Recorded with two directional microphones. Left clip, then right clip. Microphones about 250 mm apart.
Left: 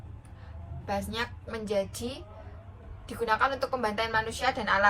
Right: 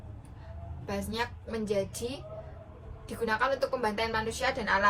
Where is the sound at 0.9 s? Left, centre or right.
Centre.